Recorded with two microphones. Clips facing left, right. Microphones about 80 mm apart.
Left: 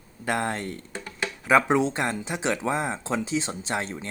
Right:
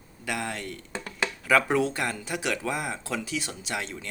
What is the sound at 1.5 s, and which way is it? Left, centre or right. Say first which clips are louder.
Speech: left 3 dB; left.